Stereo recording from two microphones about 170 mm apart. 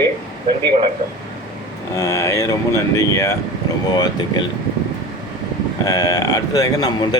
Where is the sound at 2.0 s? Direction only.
15° left (ahead or behind).